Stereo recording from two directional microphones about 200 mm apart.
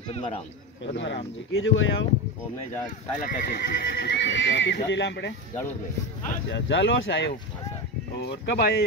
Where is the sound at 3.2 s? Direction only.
45° left (ahead or behind).